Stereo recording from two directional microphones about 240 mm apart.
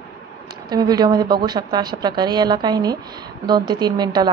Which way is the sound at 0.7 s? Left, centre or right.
Centre.